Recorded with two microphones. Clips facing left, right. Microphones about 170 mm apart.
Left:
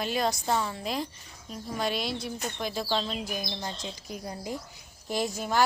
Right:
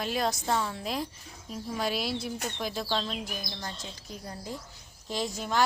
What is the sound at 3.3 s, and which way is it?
A woman's voice, 20° left (ahead or behind).